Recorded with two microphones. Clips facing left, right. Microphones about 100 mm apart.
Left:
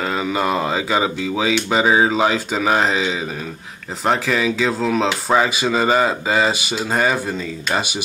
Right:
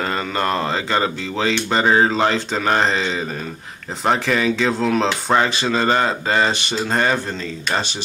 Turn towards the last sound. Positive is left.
turn(degrees=5)  # may be behind; listen again after turning